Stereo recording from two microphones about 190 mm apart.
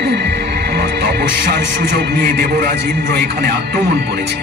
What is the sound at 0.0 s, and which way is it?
Music, 60° right (ahead or behind).